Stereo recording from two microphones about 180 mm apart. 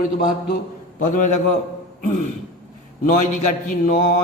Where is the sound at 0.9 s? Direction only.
45° left (ahead or behind).